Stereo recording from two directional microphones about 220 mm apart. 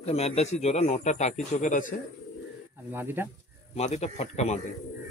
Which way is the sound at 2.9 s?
10° right (ahead or behind).